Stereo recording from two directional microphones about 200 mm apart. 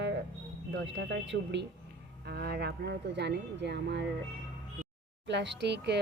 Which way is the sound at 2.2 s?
50° right (ahead or behind).